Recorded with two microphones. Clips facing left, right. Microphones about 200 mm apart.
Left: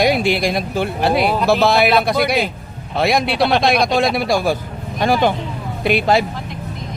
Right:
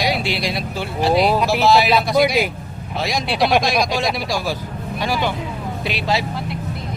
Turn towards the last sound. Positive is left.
turn(degrees=50)  # may be behind; listen again after turning